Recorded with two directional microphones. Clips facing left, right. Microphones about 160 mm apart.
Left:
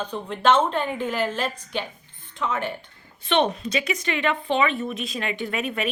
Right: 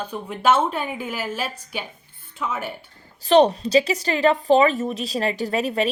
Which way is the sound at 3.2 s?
35° right (ahead or behind).